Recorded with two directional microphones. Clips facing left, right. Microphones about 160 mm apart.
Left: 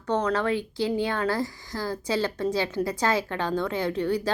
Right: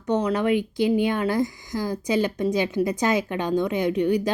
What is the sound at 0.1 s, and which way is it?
Speech, 15° right (ahead or behind).